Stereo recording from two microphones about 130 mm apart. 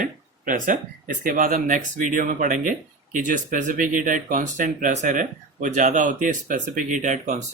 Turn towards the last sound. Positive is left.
turn(degrees=-65)  # may be behind; listen again after turning